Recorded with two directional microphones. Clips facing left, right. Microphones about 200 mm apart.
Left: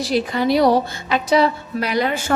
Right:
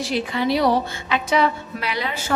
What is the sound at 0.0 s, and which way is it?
A woman's voice, 40° left (ahead or behind).